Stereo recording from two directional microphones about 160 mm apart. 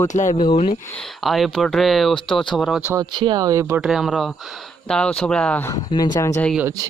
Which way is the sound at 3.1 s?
30° right (ahead or behind).